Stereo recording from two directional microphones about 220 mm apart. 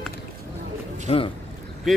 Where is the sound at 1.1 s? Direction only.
25° left (ahead or behind).